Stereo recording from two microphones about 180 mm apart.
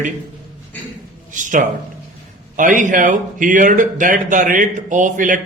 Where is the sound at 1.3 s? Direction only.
45° right (ahead or behind).